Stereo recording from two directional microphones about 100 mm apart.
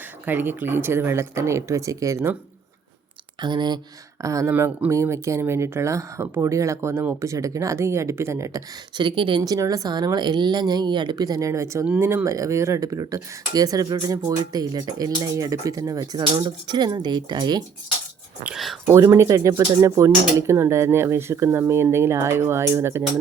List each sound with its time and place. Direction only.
0.3 s speech: 20° right (ahead or behind)
3.4 s speech: 50° right (ahead or behind)
4.2 s speech: 35° right (ahead or behind)
9.0 s speech: 55° right (ahead or behind)
9.4 s speech: 40° right (ahead or behind)
18.5 s speech: centre (ahead or behind)
18.9 s speech: 30° right (ahead or behind)